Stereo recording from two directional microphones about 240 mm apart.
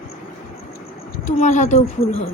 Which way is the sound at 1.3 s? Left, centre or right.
Left.